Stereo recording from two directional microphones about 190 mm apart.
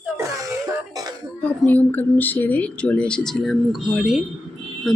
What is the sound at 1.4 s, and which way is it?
Speech, 10° left (ahead or behind).